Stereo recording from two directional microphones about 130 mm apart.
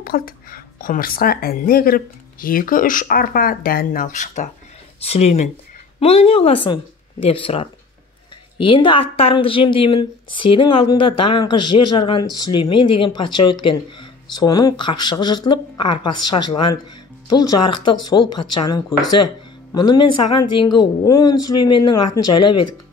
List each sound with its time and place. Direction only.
0.0 s speech: 90° left; by 4.5 s 70° left (ahead or behind)
5.0 s speech: 55° left (ahead or behind); by 22.5 s 35° left (ahead or behind)